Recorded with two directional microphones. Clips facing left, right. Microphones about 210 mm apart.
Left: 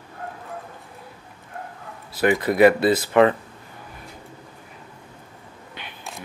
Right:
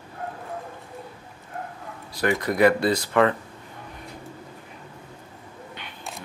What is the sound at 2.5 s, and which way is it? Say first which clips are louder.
Speech: left 3 dB; 25° left (ahead or behind).